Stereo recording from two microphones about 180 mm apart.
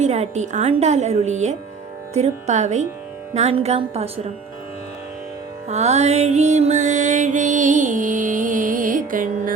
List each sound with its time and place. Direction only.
0.0 s a woman's voice: 40° right (ahead or behind)
5.6 s music: 35° right (ahead or behind)